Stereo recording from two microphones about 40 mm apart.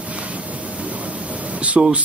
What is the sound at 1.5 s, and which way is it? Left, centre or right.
Speech, right.